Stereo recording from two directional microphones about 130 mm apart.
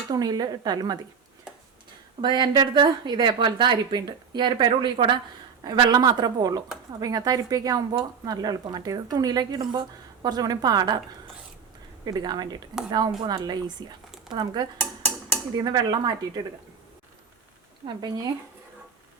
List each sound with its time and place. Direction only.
0.1 s a woman's voice: 30° right (ahead or behind)
2.2 s a woman's voice: 35° right (ahead or behind)
12.0 s a woman's voice: 30° right (ahead or behind)
17.8 s a woman's voice: 35° right (ahead or behind)